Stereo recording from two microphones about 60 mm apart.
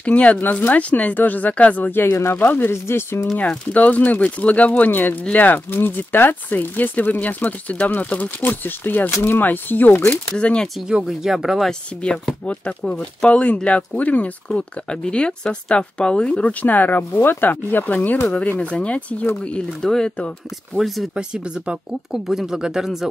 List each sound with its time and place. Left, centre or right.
0.0 s speech: left
3.3 s speech: left
10.3 s speech: centre
10.8 s speech: centre
12.0 s speech: centre; by 18.3 s left
18.6 s speech: left
20.7 s speech: centre
21.1 s speech: centre